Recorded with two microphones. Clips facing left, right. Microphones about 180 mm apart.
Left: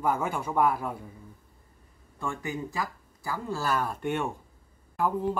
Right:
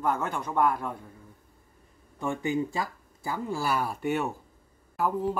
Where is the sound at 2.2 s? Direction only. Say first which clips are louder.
Right 5 dB; 20° right (ahead or behind).